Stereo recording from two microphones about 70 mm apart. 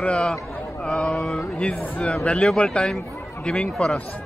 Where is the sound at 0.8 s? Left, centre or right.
Centre.